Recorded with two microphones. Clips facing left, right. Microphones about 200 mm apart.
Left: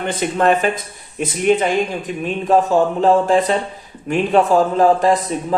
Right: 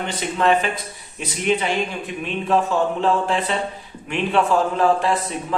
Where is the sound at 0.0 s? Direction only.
50° left (ahead or behind).